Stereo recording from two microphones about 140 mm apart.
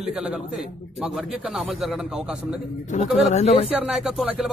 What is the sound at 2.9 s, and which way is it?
Speech, 50° left (ahead or behind).